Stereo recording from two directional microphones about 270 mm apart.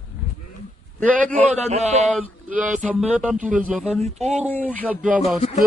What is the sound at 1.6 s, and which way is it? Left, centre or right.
Speech, right.